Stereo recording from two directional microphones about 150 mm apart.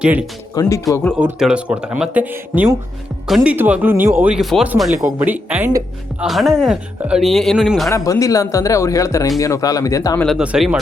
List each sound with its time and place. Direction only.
0.0 s speech: 5° right (ahead or behind)
0.5 s speech: 25° left (ahead or behind)
1.2 s speech: 5° right (ahead or behind)
5.2 s speech: 10° right (ahead or behind)
6.2 s speech: centre (ahead or behind)
7.9 s speech: 20° left (ahead or behind)
10.2 s speech: centre (ahead or behind)